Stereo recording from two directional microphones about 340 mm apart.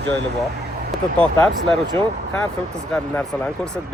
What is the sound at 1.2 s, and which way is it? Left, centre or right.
Speech, centre.